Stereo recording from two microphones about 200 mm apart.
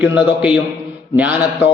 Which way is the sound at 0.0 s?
5° right (ahead or behind).